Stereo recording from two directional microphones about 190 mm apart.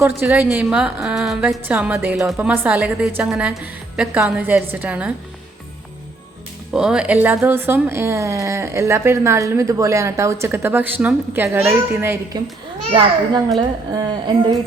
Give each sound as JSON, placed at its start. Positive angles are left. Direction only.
{"t": 0.2, "sound": "a woman's voice", "side_deg": -10}
{"t": 6.7, "sound": "a woman's voice", "side_deg": -5}
{"t": 12.9, "sound": "a woman's voice", "side_deg": -30}